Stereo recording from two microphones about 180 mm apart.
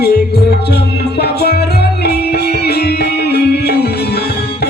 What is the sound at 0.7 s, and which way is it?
Music, 65° left (ahead or behind).